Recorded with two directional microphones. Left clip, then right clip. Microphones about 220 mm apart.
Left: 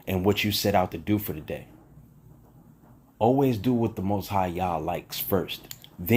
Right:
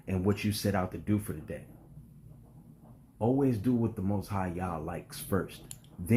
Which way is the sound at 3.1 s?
20° left (ahead or behind).